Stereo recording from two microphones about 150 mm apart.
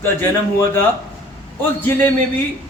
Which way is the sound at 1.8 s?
10° left (ahead or behind).